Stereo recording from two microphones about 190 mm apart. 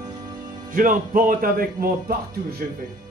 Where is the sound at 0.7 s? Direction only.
45° right (ahead or behind).